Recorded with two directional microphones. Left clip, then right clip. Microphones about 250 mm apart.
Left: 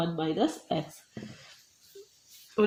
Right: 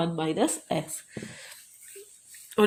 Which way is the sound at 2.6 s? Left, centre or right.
Right.